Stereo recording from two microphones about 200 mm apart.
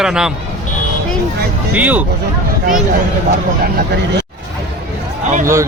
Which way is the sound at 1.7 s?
10° right (ahead or behind).